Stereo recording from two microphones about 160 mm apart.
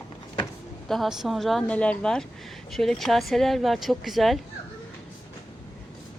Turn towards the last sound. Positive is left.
turn(degrees=0)  # may be behind; listen again after turning